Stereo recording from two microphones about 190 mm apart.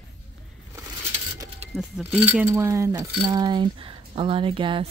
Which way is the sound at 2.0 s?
10° right (ahead or behind).